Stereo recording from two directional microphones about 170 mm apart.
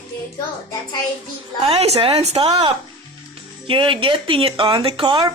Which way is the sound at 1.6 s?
35° right (ahead or behind).